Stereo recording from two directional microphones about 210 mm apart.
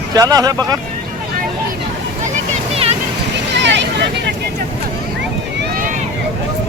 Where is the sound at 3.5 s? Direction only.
55° right (ahead or behind).